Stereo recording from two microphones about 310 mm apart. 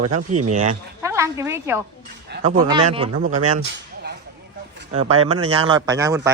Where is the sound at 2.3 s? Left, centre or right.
Right.